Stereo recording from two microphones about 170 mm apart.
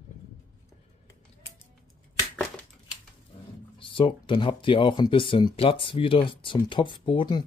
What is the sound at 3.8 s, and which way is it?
Speech, 30° left (ahead or behind).